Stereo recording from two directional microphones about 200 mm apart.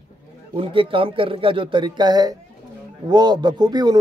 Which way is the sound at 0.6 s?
25° right (ahead or behind).